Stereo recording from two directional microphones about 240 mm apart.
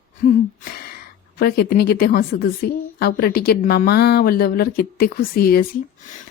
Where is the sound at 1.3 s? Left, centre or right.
Left.